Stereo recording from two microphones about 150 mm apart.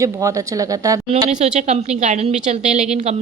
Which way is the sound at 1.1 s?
50° right (ahead or behind).